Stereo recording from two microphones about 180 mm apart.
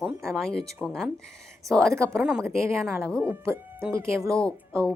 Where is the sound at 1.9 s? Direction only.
15° right (ahead or behind).